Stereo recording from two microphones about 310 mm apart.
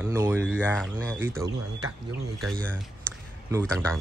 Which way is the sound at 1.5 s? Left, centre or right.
Right.